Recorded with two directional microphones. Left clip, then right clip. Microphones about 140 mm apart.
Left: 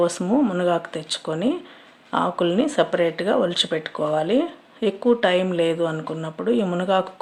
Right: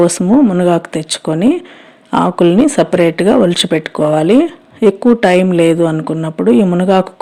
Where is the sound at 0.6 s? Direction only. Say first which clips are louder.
Right 9 dB; 55° right (ahead or behind).